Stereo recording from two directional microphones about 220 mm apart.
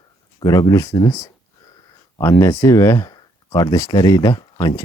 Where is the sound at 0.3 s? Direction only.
20° left (ahead or behind).